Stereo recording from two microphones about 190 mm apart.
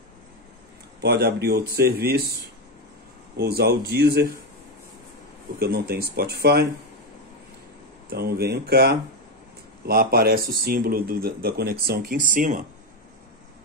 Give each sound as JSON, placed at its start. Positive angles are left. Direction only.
{"t": 1.0, "sound": "speech", "side_deg": -60}
{"t": 3.3, "sound": "speech", "side_deg": -55}
{"t": 5.6, "sound": "speech", "side_deg": -55}
{"t": 8.1, "sound": "speech", "side_deg": -55}